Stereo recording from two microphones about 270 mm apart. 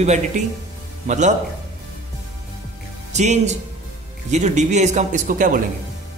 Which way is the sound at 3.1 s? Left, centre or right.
Right.